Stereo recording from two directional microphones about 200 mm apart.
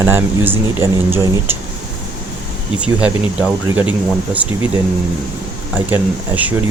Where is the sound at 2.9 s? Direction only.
5° right (ahead or behind).